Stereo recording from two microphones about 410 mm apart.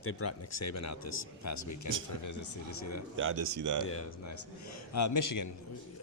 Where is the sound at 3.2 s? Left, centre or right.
Right.